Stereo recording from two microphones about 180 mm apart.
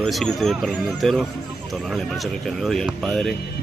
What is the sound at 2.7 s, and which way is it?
Speech, centre (ahead or behind).